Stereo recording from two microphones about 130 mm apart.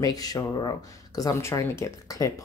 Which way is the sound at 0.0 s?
30° left (ahead or behind).